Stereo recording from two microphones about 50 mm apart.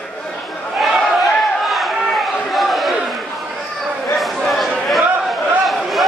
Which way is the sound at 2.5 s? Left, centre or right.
Centre.